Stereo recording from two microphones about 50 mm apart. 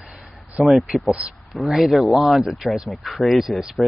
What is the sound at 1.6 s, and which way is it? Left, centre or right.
Speech, centre.